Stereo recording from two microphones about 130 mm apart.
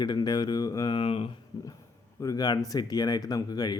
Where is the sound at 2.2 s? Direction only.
30° left (ahead or behind).